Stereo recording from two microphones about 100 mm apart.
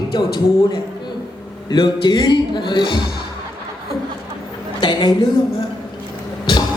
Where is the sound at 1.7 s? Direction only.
50° left (ahead or behind).